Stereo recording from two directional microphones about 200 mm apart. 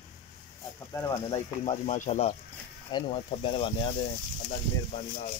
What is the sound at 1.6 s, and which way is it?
Speech, 35° left (ahead or behind).